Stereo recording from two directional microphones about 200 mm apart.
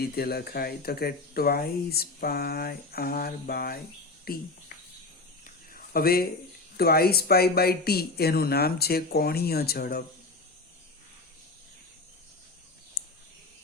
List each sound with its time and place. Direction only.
0.0 s speech: 50° left (ahead or behind)
5.7 s a sound: 50° left (ahead or behind)
6.7 s speech: 50° left (ahead or behind)